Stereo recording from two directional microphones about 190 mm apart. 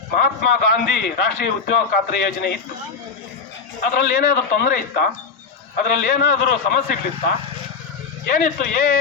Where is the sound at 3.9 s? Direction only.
45° left (ahead or behind).